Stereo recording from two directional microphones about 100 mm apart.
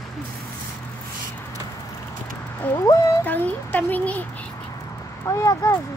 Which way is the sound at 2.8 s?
35° left (ahead or behind).